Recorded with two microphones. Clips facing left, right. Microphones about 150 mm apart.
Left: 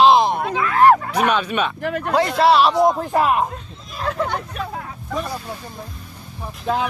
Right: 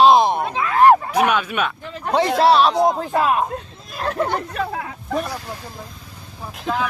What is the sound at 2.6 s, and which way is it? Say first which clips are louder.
Speech: left 1 dB; 5° left (ahead or behind).